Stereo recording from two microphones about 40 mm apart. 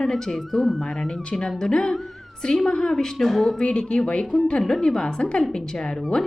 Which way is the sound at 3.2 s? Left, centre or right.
Centre.